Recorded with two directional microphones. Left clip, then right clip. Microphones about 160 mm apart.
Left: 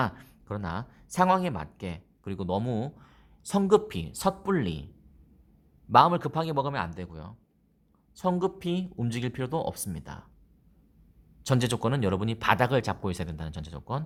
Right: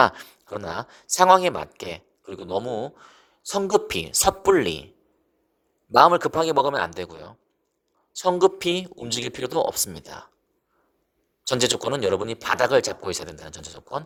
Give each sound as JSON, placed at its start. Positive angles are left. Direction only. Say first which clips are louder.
{"t": 0.0, "sound": "a man's voice", "louder": "right 12 dB", "side_deg": -40}
{"t": 2.6, "sound": "speech", "louder": "right 5 dB", "side_deg": 0}
{"t": 2.9, "sound": "a sound", "louder": "right 8 dB", "side_deg": -25}
{"t": 3.8, "sound": "a man's voice", "louder": "right 8 dB", "side_deg": -40}
{"t": 5.9, "sound": "a man's voice", "louder": "right 5 dB", "side_deg": -35}
{"t": 11.4, "sound": "a man's voice", "louder": "right 6 dB", "side_deg": -30}